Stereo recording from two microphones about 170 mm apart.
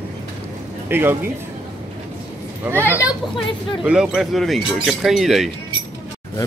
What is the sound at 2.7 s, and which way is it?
A child's voice, 10° right (ahead or behind).